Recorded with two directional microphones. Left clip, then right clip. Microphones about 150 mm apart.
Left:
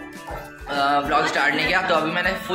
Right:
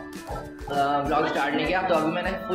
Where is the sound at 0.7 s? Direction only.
20° left (ahead or behind).